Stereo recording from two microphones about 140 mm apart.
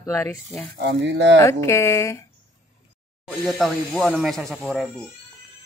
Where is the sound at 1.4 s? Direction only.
20° left (ahead or behind).